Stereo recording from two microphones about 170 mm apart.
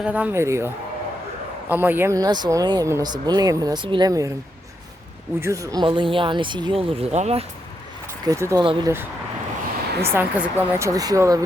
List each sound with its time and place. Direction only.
0.0 s speech: 10° right (ahead or behind)
1.7 s speech: 10° right (ahead or behind)
5.4 s speech: 20° right (ahead or behind)
5.8 s speech: 30° right (ahead or behind)
8.2 s speech: 20° right (ahead or behind)
8.6 s speech: 30° right (ahead or behind)
10.0 s speech: 15° right (ahead or behind)